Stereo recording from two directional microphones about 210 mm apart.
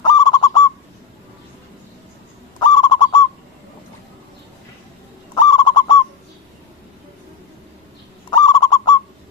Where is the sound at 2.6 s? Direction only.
20° left (ahead or behind).